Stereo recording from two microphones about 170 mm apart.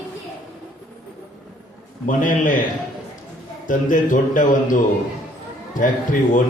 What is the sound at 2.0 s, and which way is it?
Speech, 50° left (ahead or behind).